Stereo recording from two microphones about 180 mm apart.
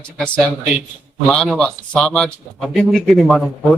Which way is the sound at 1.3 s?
5° left (ahead or behind).